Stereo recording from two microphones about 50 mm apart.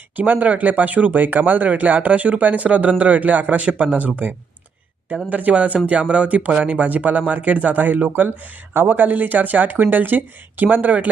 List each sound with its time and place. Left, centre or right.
0.2 s speech: right